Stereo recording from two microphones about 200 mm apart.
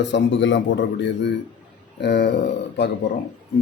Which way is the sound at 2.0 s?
55° left (ahead or behind).